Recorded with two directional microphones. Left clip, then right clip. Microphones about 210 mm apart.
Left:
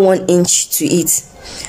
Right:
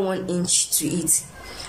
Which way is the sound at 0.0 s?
35° left (ahead or behind).